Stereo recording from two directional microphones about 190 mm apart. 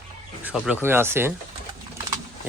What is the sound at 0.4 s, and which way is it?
Speech, 5° right (ahead or behind).